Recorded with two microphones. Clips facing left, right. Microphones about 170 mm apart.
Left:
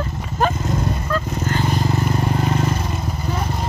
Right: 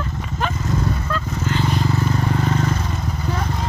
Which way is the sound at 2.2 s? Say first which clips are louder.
Left 1 dB; 10° left (ahead or behind).